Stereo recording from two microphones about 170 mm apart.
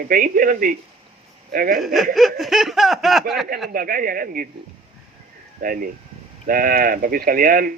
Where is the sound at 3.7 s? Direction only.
55° right (ahead or behind).